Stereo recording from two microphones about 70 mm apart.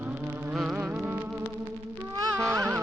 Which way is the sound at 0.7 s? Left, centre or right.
Right.